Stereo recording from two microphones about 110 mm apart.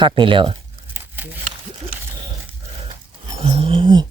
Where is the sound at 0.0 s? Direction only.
50° right (ahead or behind).